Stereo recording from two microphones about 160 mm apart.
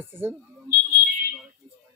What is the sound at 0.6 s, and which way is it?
Fire alarm, 80° right.